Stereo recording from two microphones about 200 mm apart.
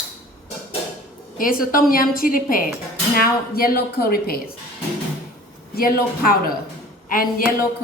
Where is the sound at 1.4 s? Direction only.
45° left (ahead or behind).